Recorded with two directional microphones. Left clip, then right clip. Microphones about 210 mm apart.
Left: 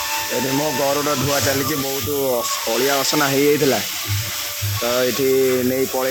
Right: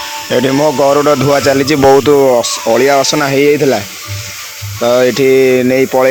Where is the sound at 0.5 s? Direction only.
40° right (ahead or behind).